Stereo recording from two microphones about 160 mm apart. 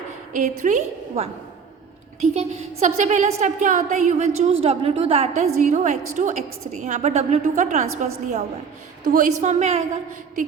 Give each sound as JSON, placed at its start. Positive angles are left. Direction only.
{"t": 0.3, "sound": "a woman's voice", "side_deg": -50}